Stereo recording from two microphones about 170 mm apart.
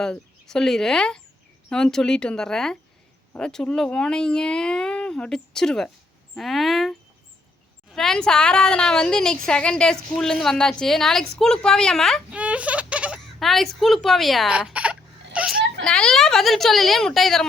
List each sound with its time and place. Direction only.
0.0 s a woman's voice: 5° left (ahead or behind)
7.9 s a woman's voice: 5° left (ahead or behind)
15.8 s a woman's voice: 5° left (ahead or behind)